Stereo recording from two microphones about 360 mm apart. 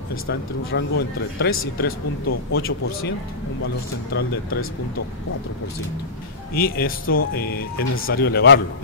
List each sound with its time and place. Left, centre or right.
0.1 s speech: left
4.1 s speech: left
6.5 s speech: left